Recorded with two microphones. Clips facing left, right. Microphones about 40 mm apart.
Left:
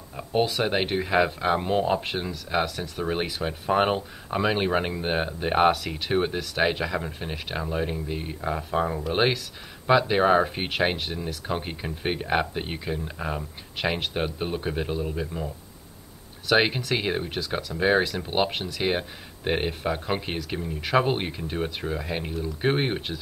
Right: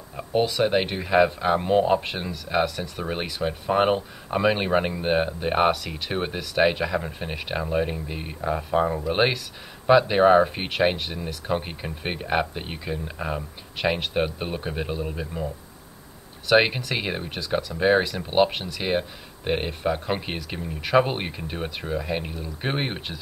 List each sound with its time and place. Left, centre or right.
0.3 s speech: centre